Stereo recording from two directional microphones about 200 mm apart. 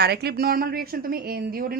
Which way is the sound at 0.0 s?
55° right (ahead or behind).